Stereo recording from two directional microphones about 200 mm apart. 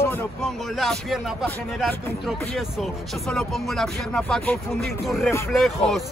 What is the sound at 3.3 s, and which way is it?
Speech, 5° left (ahead or behind).